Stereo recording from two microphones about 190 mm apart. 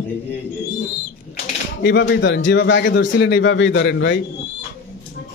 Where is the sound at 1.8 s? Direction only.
65° left (ahead or behind).